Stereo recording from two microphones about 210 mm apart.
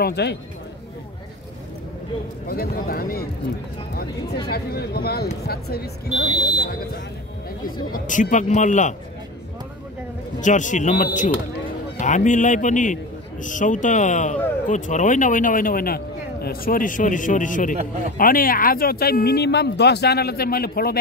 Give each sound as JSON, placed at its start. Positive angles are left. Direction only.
{"t": 0.0, "sound": "speech", "side_deg": 50}
{"t": 2.4, "sound": "speech", "side_deg": 45}
{"t": 4.5, "sound": "speech", "side_deg": 50}
{"t": 6.3, "sound": "speech", "side_deg": -5}
{"t": 6.6, "sound": "speech", "side_deg": 45}
{"t": 7.9, "sound": "a man's voice", "side_deg": 35}
{"t": 10.4, "sound": "a man's voice", "side_deg": 35}